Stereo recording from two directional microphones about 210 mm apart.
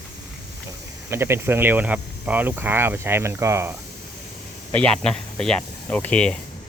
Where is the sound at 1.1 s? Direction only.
10° right (ahead or behind).